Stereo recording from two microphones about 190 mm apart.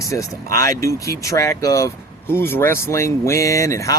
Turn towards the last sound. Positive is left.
turn(degrees=15)  # may be behind; listen again after turning